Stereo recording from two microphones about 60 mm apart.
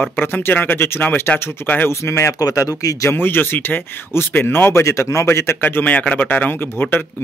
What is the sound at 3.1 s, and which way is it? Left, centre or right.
Speech, left.